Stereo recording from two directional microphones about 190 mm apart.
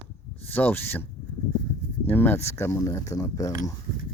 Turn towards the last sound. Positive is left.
turn(degrees=15)  # may be behind; listen again after turning